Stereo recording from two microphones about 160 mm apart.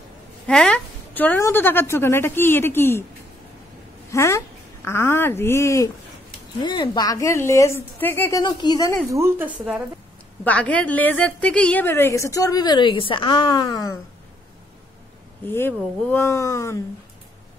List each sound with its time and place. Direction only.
0.5 s a woman's voice: 5° left (ahead or behind)
4.1 s a woman's voice: 20° left (ahead or behind)
6.6 s a woman's voice: 30° left (ahead or behind); by 8.4 s 15° left (ahead or behind)
8.4 s a woman's voice: 25° left (ahead or behind)
9.1 s a woman's voice: 15° right (ahead or behind)
10.4 s a woman's voice: 10° left (ahead or behind)
15.4 s a woman's voice: 15° left (ahead or behind)